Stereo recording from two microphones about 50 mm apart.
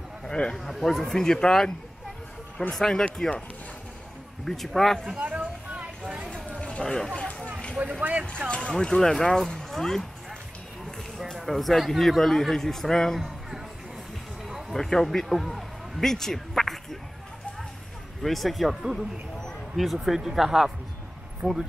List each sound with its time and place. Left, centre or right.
0.3 s a man's voice: centre
0.7 s speech: centre
2.7 s speech: centre
4.5 s a man's voice: centre
5.2 s a sound: right
5.8 s vehicle: right
6.3 s a sound: left
6.8 s speech: centre
7.2 s a sound: left
7.8 s speech: right
8.5 s speech: centre
11.3 s a man's voice: centre
14.7 s a man's voice: centre
18.2 s a man's voice: centre